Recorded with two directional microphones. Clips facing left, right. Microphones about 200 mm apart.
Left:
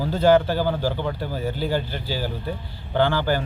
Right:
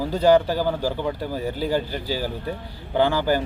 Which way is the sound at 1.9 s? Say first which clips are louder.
Right 2 dB; 40° right (ahead or behind).